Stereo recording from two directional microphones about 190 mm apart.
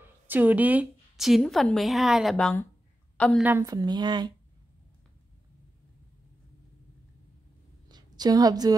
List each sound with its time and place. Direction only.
0.3 s a woman's voice: 10° right (ahead or behind)
3.4 s a woman's voice: 15° right (ahead or behind)
7.9 s a woman's voice: 20° right (ahead or behind)